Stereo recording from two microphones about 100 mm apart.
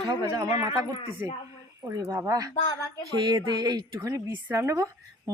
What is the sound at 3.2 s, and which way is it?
Speech, 50° right (ahead or behind).